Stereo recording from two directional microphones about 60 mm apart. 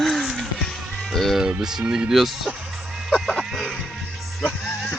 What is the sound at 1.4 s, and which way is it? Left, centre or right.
Speech, centre.